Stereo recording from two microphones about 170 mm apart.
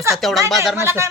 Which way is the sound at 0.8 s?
15° right (ahead or behind).